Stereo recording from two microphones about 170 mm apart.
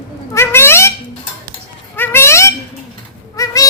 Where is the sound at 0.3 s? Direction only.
15° left (ahead or behind).